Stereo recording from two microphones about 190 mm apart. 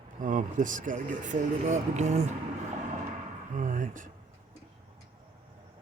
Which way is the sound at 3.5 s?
40° right (ahead or behind).